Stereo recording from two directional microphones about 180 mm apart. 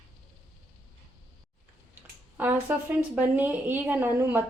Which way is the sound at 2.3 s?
10° right (ahead or behind).